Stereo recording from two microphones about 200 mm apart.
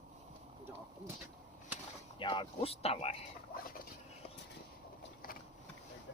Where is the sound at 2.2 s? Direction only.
25° left (ahead or behind).